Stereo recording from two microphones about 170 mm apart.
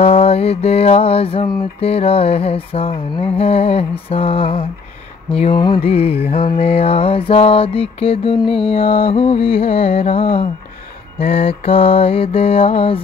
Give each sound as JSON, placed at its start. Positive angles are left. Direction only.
{"t": 0.0, "sound": "music", "side_deg": 35}
{"t": 1.8, "sound": "mantra", "side_deg": 35}